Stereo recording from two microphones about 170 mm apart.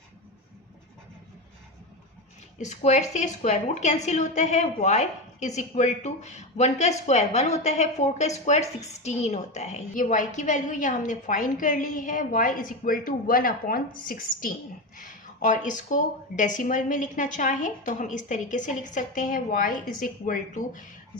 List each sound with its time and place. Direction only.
2.6 s a woman's voice: 45° left (ahead or behind)